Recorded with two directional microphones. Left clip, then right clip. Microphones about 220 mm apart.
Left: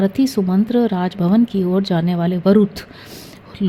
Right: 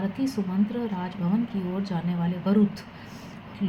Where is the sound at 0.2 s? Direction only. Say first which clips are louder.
Left 10 dB; 55° left (ahead or behind).